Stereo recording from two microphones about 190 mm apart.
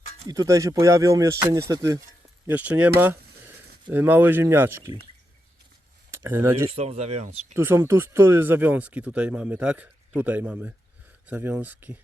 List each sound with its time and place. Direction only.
0.3 s speech: 20° right (ahead or behind)
3.0 s a sound: 10° right (ahead or behind)
3.9 s speech: 10° right (ahead or behind)
6.1 s speech: 15° right (ahead or behind)
6.7 s speech: 35° right (ahead or behind)
7.5 s speech: 10° right (ahead or behind)